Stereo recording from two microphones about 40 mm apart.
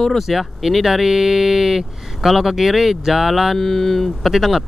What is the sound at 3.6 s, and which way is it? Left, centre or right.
Speech, centre.